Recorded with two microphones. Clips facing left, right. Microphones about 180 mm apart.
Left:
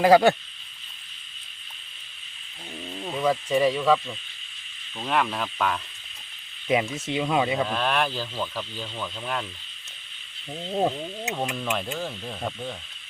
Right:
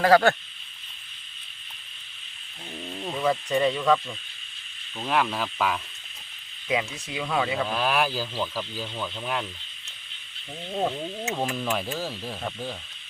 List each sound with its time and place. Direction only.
0.0 s speech: 15° left (ahead or behind)
2.8 s speech: centre (ahead or behind)
6.7 s speech: 25° left (ahead or behind)
7.7 s speech: 5° right (ahead or behind)
10.7 s speech: 15° left (ahead or behind)
11.3 s speech: 5° right (ahead or behind)